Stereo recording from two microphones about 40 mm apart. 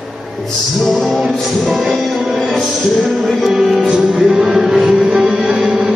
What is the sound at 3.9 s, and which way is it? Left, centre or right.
Music, centre.